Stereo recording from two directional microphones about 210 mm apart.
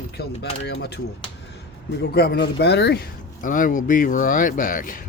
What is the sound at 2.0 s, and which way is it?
Speech, 50° left (ahead or behind).